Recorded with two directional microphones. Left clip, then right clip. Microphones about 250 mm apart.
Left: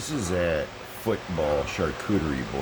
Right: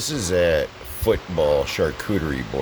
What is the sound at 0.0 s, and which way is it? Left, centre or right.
Speech, right.